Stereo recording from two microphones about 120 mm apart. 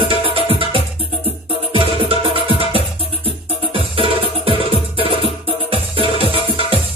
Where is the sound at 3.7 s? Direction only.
50° right (ahead or behind).